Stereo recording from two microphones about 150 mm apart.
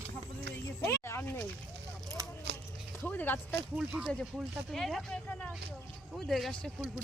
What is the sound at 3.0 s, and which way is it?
Speech, 10° left (ahead or behind).